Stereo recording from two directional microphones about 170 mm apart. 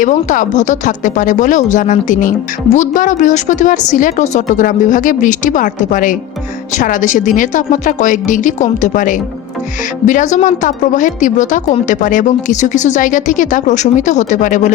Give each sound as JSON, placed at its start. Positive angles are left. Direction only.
{"t": 0.0, "sound": "speech", "side_deg": 45}